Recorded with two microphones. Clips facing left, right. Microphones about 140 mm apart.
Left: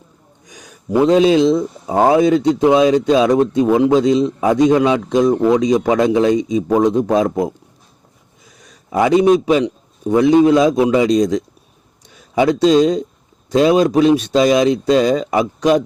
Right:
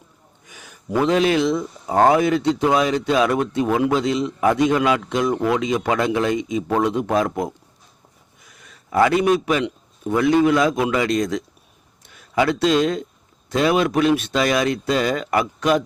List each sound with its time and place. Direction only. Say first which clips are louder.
0.4 s a sound: left 5 dB; 15° left (ahead or behind)
1.1 s a man's voice: left 7 dB; 15° left (ahead or behind)
1.9 s a man's voice: left 2 dB; 5° left (ahead or behind)
2.1 s a man's voice: left 5 dB; 15° left (ahead or behind)
7.3 s speech: left 6 dB; centre (ahead or behind)
8.7 s a man's voice: left 4 dB; 15° left (ahead or behind)
12.3 s a man's voice: left 6 dB; 15° left (ahead or behind)
13.7 s speech: left 6 dB; 35° left (ahead or behind)
14.0 s speech: left 6 dB; 20° left (ahead or behind)